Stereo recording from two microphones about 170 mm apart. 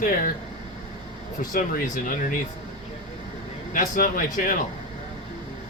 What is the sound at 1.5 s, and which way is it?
Speech, 50° left (ahead or behind).